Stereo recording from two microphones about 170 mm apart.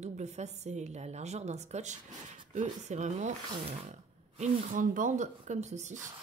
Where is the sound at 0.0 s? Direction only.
40° right (ahead or behind).